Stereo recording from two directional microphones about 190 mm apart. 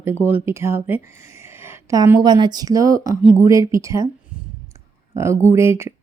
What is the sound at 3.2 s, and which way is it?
Speech, 5° right (ahead or behind).